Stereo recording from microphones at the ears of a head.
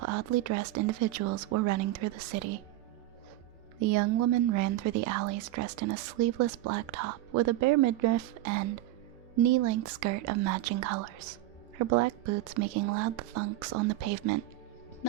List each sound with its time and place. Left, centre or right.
0.0 s a woman's voice: right
3.8 s a woman's voice: right